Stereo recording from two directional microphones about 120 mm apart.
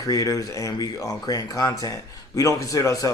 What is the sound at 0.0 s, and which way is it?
Speech, 30° left (ahead or behind).